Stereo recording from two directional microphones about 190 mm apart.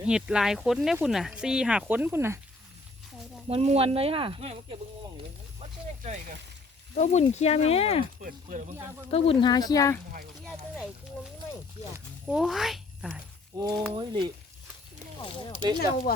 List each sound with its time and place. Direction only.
0.0 s speech: 5° right (ahead or behind)
3.5 s speech: 35° right (ahead or behind)
6.9 s speech: 40° left (ahead or behind)
8.2 s speech: 45° right (ahead or behind)
9.0 s speech: 30° left (ahead or behind)
10.4 s speech: centre (ahead or behind)
11.9 s speech: 5° right (ahead or behind)
13.6 s speech: 20° right (ahead or behind)
16.1 s speech: 55° left (ahead or behind)